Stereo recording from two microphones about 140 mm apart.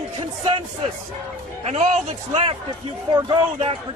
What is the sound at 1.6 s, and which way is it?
Speech, 50° right (ahead or behind).